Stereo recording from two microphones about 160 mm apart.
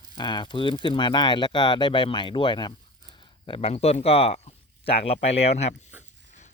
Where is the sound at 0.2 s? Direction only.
25° left (ahead or behind).